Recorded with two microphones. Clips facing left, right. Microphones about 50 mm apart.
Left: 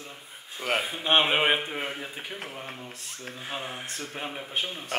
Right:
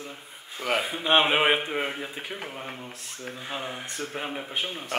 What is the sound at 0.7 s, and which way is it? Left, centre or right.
A man's voice, centre.